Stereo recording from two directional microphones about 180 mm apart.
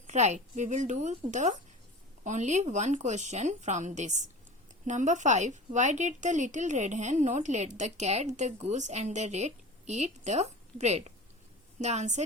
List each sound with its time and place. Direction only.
0.1 s a woman's voice: 40° right (ahead or behind)